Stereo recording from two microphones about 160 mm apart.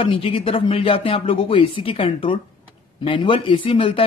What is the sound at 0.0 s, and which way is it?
Speech, 35° left (ahead or behind).